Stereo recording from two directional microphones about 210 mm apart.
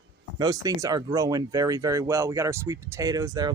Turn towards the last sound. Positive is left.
turn(degrees=-15)  # may be behind; listen again after turning